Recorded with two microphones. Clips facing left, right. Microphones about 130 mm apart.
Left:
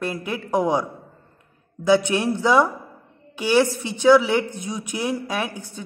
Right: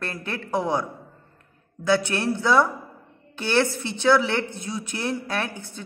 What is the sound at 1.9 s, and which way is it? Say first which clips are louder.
Speech: left 4 dB; 15° left (ahead or behind).